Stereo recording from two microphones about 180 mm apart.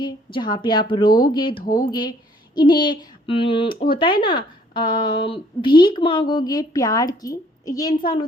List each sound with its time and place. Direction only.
0.0 s speech: 25° left (ahead or behind)